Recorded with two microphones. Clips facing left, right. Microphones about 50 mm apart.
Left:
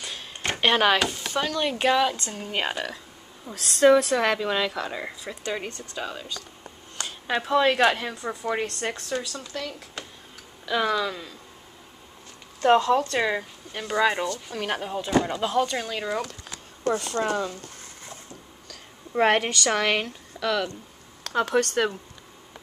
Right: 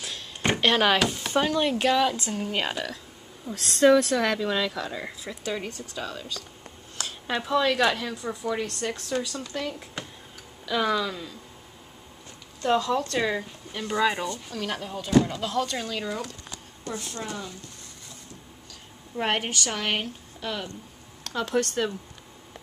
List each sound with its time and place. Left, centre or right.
0.6 s speech: centre
1.3 s speech: centre
1.7 s a woman's voice: centre
2.5 s a woman's voice: centre
3.9 s a woman's voice: centre
8.9 s speech: centre
9.5 s speech: centre
10.6 s speech: centre
12.6 s speech: left
13.2 s speech: centre
17.0 s speech: left
19.1 s speech: left
21.3 s speech: left